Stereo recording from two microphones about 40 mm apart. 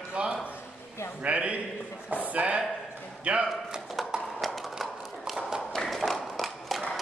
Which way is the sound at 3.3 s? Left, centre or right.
Right.